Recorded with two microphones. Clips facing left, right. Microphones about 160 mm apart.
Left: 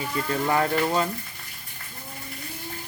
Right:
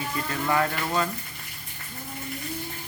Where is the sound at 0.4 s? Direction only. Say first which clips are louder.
Left 2 dB; 25° left (ahead or behind).